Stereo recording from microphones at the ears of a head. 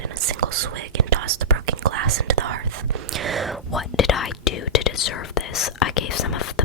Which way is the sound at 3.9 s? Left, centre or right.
Left.